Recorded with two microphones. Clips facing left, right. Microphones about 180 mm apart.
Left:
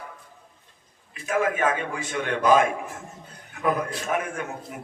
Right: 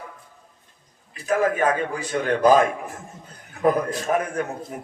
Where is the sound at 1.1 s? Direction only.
35° right (ahead or behind).